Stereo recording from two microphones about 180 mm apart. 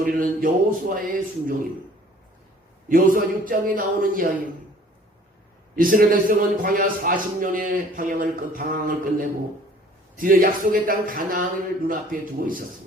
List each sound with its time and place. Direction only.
0.0 s a man's voice: 50° right (ahead or behind)
2.9 s a man's voice: 50° right (ahead or behind)
5.7 s a man's voice: 50° right (ahead or behind)